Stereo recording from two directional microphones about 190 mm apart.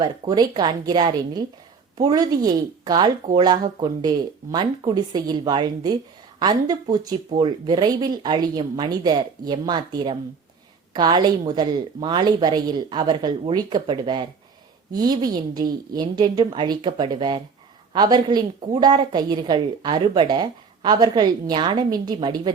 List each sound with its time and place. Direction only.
0.0 s a woman's voice: 20° right (ahead or behind)